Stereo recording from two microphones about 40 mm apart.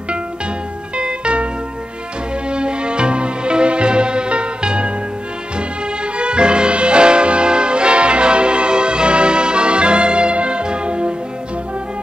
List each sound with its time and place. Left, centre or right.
0.9 s music: right
2.5 s music: right
6.1 s music: right